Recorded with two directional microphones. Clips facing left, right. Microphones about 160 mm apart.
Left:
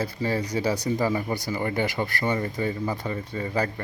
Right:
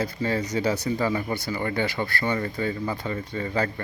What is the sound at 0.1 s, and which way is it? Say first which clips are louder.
Speech: right 1 dB; 10° left (ahead or behind).